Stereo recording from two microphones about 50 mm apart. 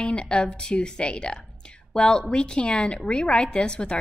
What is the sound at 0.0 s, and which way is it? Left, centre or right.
A woman's voice, left.